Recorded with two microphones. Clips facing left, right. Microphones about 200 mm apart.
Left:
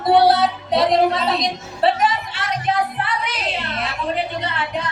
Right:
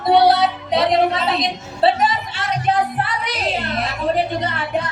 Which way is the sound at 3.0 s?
40° right (ahead or behind).